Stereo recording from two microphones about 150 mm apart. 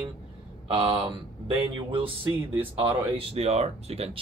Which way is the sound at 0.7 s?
40° right (ahead or behind).